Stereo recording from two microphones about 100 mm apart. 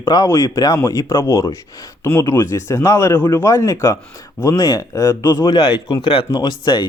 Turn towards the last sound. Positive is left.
turn(degrees=50)  # may be behind; listen again after turning